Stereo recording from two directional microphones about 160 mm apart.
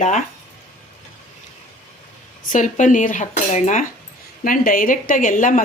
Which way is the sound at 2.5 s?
50° left (ahead or behind).